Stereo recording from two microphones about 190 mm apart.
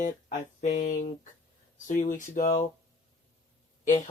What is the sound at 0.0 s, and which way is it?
Speech, 40° left (ahead or behind).